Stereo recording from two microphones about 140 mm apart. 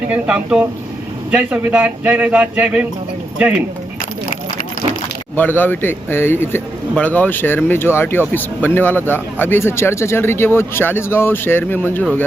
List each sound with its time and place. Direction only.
0.1 s speech: 10° right (ahead or behind)
5.4 s speech: 15° left (ahead or behind)